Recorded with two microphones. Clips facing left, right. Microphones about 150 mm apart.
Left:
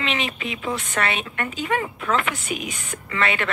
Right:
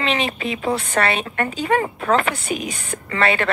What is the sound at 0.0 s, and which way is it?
A woman's voice, 35° right (ahead or behind).